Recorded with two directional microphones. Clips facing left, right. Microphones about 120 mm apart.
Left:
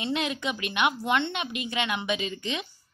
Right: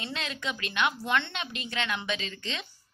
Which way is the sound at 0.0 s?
15° left (ahead or behind).